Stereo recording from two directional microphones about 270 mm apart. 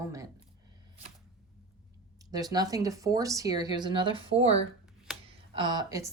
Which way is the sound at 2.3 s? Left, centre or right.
Centre.